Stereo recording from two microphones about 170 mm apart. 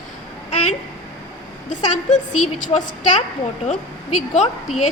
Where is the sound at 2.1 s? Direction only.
45° left (ahead or behind).